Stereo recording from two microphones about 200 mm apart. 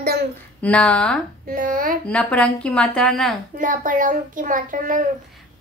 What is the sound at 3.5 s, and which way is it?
A child's voice, 40° right (ahead or behind).